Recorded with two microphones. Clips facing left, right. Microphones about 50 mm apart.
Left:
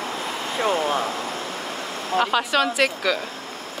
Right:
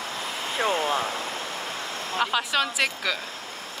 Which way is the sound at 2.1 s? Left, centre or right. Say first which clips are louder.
Left 4 dB; centre.